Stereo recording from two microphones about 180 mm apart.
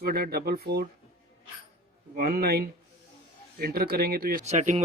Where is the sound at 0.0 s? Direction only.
60° right (ahead or behind).